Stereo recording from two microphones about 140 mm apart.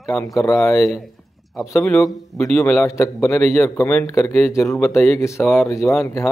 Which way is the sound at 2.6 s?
15° left (ahead or behind).